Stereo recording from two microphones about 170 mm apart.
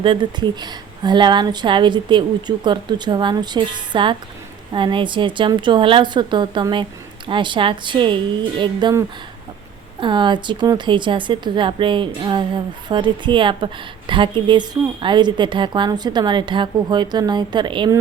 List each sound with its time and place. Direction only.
0.0 s speech: 30° right (ahead or behind)